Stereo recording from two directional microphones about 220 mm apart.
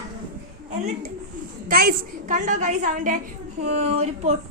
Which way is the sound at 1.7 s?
40° right (ahead or behind).